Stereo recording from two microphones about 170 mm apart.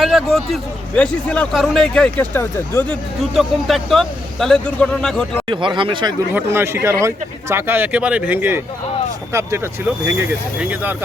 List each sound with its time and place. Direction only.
0.0 s speech: centre (ahead or behind)
3.3 s speech: centre (ahead or behind)
5.5 s speech: 30° right (ahead or behind)
6.3 s speech: 15° right (ahead or behind)